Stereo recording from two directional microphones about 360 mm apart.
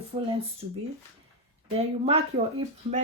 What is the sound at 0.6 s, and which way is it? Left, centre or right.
Speech, centre.